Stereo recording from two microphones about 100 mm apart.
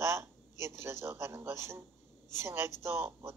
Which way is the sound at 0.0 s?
25° right (ahead or behind).